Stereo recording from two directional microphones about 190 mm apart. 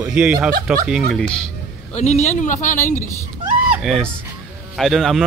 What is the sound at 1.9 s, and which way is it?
Speech, 35° left (ahead or behind).